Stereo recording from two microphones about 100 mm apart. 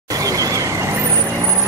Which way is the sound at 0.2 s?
35° right (ahead or behind).